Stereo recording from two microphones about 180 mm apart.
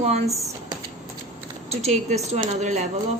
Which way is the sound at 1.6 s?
40° right (ahead or behind).